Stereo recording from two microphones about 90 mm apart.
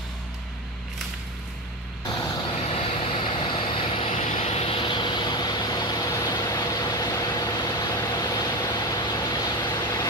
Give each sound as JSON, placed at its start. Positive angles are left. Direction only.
{"t": 2.6, "sound": "vehicle", "side_deg": 90}